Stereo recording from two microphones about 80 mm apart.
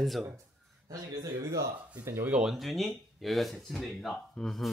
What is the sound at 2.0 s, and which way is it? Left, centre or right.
Speech, right.